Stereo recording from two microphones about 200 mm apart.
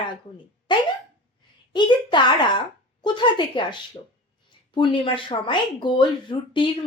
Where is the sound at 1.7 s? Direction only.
25° left (ahead or behind).